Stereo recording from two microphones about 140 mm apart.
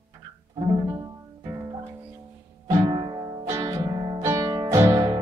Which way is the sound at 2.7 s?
30° right (ahead or behind).